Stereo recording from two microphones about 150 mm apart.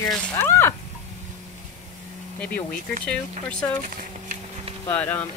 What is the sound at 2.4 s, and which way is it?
Speech, 10° left (ahead or behind).